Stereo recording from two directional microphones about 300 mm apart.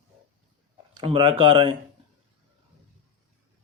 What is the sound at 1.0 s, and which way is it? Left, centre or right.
Speech, centre.